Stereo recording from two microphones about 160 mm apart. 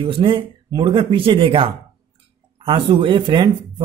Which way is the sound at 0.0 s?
30° right (ahead or behind).